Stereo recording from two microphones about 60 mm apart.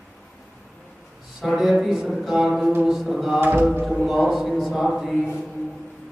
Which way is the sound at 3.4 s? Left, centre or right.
Right.